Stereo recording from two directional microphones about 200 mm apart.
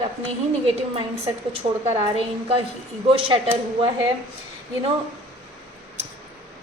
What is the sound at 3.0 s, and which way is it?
Speech, 25° right (ahead or behind).